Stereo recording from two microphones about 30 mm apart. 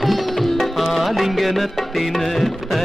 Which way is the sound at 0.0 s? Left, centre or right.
Centre.